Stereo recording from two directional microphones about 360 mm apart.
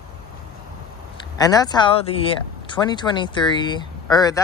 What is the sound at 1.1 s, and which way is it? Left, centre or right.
Speech, centre.